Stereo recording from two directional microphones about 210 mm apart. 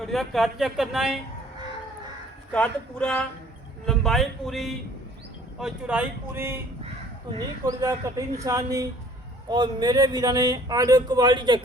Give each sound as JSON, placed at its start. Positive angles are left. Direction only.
{"t": 0.0, "sound": "speech", "side_deg": 0}
{"t": 2.5, "sound": "speech", "side_deg": 5}